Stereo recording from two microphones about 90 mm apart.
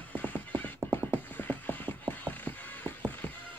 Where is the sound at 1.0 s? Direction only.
20° left (ahead or behind).